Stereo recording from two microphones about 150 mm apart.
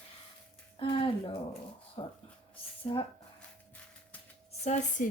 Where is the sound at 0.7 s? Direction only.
35° left (ahead or behind).